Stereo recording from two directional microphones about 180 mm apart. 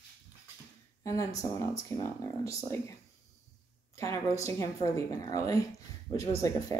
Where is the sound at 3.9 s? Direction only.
15° left (ahead or behind).